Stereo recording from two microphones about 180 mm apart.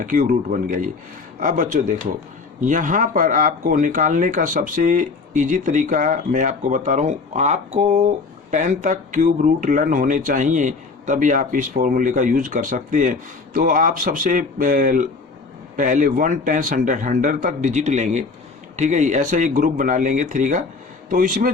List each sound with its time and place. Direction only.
0.0 s speech: 45° right (ahead or behind)